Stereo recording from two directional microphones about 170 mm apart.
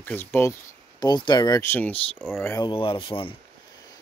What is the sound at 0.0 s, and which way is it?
Speech, 10° left (ahead or behind).